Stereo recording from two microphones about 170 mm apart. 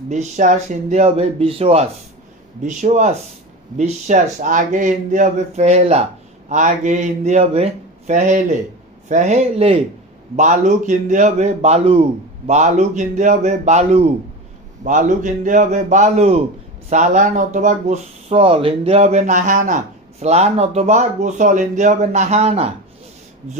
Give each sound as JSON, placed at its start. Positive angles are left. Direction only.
{"t": 0.1, "sound": "speech", "side_deg": -45}